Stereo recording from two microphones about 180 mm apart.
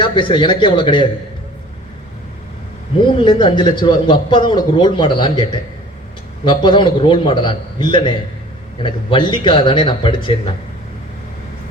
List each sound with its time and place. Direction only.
0.0 s a man's voice: 25° left (ahead or behind)
3.2 s a man's voice: 25° left (ahead or behind)